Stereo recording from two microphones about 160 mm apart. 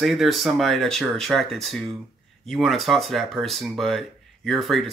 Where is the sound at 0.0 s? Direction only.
Centre (ahead or behind).